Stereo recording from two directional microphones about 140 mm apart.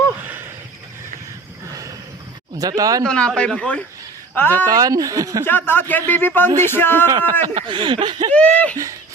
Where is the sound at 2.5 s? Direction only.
25° right (ahead or behind).